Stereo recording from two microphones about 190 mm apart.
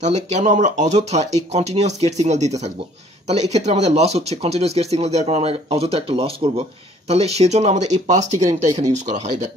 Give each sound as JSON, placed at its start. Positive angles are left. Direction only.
{"t": 0.0, "sound": "speech", "side_deg": -40}